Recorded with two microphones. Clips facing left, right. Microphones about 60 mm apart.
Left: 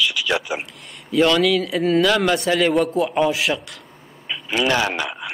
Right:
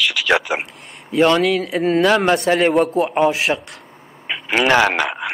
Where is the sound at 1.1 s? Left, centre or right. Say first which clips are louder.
Right 2 dB; right.